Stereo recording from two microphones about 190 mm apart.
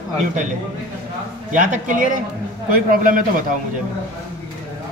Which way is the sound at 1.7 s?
45° right (ahead or behind).